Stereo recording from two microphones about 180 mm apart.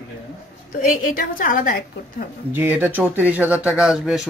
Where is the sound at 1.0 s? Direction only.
50° left (ahead or behind).